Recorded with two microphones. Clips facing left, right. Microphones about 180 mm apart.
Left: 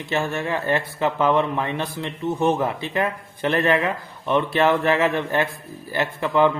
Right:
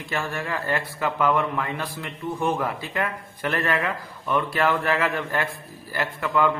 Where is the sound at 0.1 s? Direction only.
25° left (ahead or behind).